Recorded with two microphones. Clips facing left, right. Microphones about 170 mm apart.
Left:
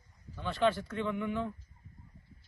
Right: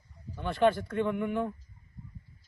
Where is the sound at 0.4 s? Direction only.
55° right (ahead or behind).